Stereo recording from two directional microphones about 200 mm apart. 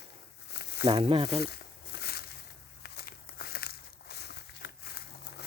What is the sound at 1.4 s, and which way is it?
Snake, 50° left (ahead or behind).